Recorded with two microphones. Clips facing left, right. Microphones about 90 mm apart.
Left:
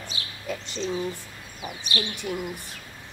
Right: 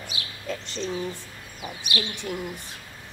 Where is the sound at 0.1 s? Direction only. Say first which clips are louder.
Right 1 dB; 35° left (ahead or behind).